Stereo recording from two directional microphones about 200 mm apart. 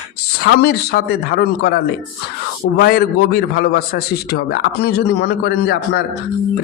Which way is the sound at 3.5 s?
55° left (ahead or behind).